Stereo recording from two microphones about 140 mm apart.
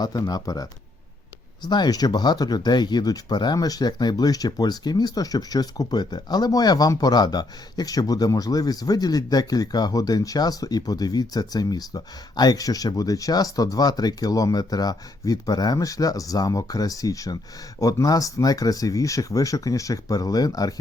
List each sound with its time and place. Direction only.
0.0 s speech: 25° left (ahead or behind)